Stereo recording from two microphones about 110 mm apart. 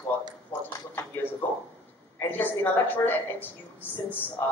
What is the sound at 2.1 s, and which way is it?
A woman's voice, 15° left (ahead or behind).